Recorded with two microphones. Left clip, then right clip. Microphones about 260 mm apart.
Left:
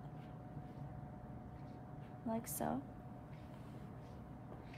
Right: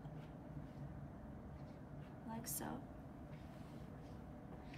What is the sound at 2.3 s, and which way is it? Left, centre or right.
Speech, left.